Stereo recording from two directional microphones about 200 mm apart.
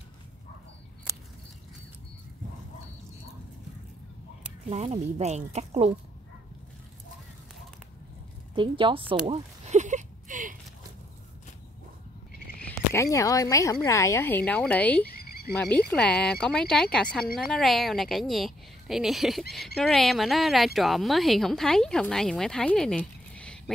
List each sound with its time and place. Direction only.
4.6 s speech: 30° right (ahead or behind)
8.5 s a woman's voice: 25° right (ahead or behind)
9.2 s a sound: 35° right (ahead or behind)
12.6 s speech: 15° left (ahead or behind)
15.0 s cricket: 50° left (ahead or behind)
15.5 s speech: 5° left (ahead or behind)